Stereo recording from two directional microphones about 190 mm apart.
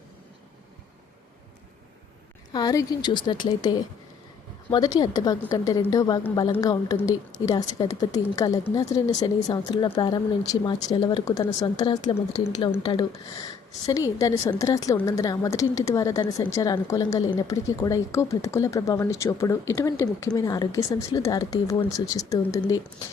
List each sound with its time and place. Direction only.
2.5 s a woman's voice: 20° left (ahead or behind)